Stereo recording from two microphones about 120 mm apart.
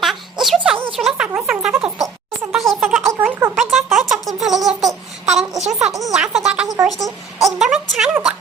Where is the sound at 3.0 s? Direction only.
25° right (ahead or behind).